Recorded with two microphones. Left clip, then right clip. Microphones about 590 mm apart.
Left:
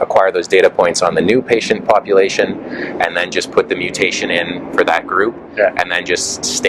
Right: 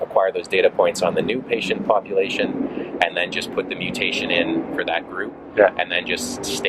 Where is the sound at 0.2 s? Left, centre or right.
Left.